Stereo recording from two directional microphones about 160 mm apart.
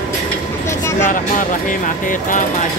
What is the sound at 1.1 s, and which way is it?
Speech, 55° left (ahead or behind).